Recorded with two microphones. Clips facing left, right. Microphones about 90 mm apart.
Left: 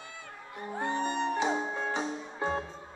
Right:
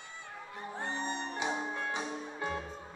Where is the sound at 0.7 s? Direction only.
50° left (ahead or behind).